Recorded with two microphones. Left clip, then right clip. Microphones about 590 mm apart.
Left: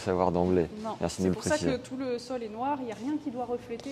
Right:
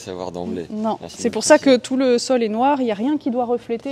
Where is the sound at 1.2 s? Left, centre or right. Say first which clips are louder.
Right 16 dB; right.